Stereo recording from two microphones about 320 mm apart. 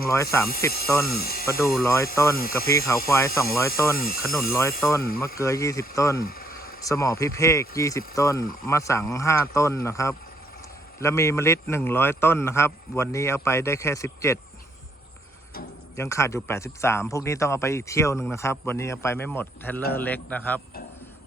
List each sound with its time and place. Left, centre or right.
0.1 s speech: centre
1.1 s speech: left
1.5 s speech: centre
2.3 s speech: left
2.6 s speech: centre
3.9 s speech: left
4.2 s speech: centre
6.2 s a sound: left
6.8 s speech: centre
16.0 s a man's voice: centre